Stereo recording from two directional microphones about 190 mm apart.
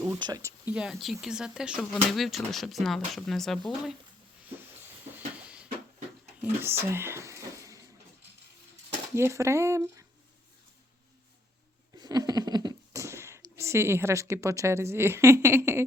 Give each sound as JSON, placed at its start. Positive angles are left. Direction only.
{"t": 0.2, "sound": "speech", "side_deg": -20}
{"t": 0.7, "sound": "speech", "side_deg": -5}
{"t": 5.1, "sound": "a sound", "side_deg": -5}
{"t": 9.1, "sound": "a woman's voice", "side_deg": -15}
{"t": 11.9, "sound": "a sound", "side_deg": -20}
{"t": 13.6, "sound": "a woman's voice", "side_deg": -15}